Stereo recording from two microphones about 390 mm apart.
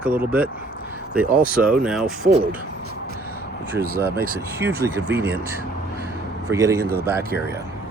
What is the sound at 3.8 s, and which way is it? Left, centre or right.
Speech, right.